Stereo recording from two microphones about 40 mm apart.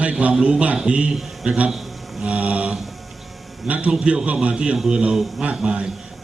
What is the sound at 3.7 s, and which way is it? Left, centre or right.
A man's voice, right.